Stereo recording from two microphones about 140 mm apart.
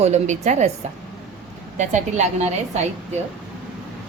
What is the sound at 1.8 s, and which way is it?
Speech, 60° right (ahead or behind).